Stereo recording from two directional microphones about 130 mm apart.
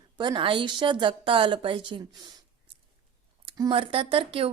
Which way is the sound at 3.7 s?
45° right (ahead or behind).